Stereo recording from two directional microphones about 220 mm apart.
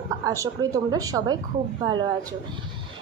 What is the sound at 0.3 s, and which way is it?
A woman's voice, 15° right (ahead or behind).